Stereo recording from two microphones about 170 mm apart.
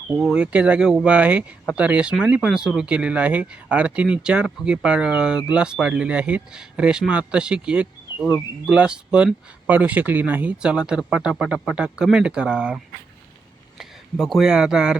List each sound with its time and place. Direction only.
0.3 s speech: 5° right (ahead or behind)